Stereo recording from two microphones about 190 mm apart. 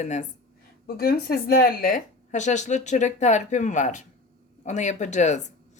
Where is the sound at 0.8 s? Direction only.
55° left (ahead or behind).